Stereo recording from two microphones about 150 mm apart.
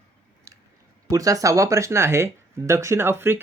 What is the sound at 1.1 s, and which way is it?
Speech, 20° right (ahead or behind).